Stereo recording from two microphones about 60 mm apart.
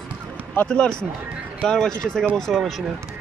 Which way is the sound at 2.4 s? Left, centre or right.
Centre.